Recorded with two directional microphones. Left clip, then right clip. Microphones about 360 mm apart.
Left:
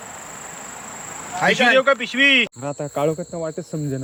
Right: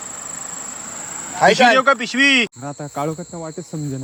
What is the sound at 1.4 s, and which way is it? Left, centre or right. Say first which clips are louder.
Speech: right 4 dB; right.